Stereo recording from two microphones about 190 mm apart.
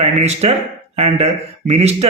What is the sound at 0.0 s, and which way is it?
Speech, 35° right (ahead or behind).